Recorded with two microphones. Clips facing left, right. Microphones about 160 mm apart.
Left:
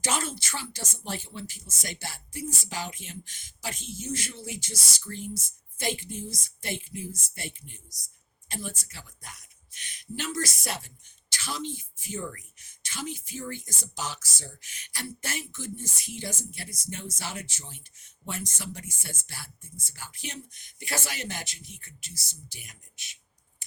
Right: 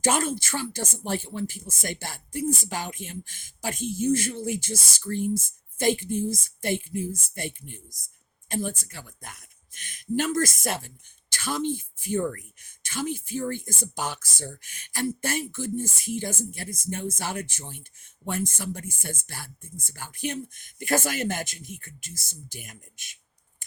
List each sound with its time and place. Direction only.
0.0 s speech: 50° right (ahead or behind)